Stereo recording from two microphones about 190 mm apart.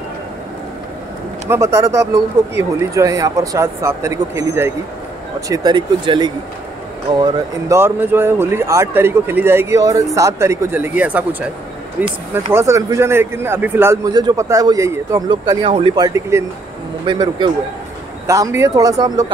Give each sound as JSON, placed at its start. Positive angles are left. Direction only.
{"t": 1.5, "sound": "speech", "side_deg": -15}